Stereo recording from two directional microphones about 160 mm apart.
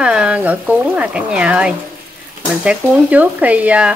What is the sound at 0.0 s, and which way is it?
Speech, 5° right (ahead or behind).